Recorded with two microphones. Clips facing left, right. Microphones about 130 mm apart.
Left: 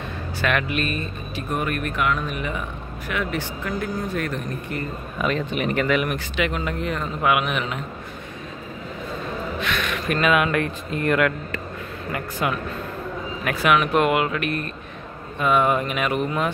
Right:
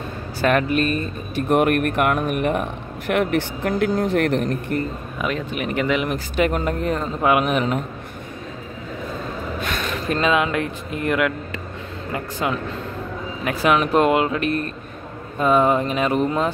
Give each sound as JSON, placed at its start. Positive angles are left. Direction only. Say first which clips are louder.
{"t": 0.4, "sound": "speech", "louder": "right 5 dB", "side_deg": -35}
{"t": 1.3, "sound": "speech", "louder": "right 9 dB", "side_deg": -65}
{"t": 5.2, "sound": "speech", "louder": "left 1 dB", "side_deg": -5}
{"t": 5.9, "sound": "speech", "louder": "right 2 dB", "side_deg": -20}
{"t": 6.1, "sound": "speech", "louder": "right 4 dB", "side_deg": -40}
{"t": 9.6, "sound": "speech", "louder": "right 1 dB", "side_deg": -35}
{"t": 12.1, "sound": "speech", "louder": "right 1 dB", "side_deg": -25}